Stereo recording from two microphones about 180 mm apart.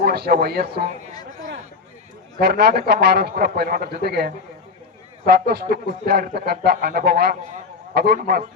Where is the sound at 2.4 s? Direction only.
60° right (ahead or behind).